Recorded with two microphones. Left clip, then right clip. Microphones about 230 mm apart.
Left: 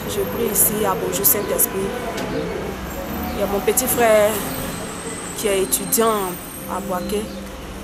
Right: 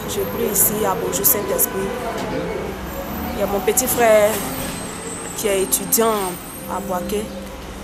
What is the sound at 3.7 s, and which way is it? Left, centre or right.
Speech, centre.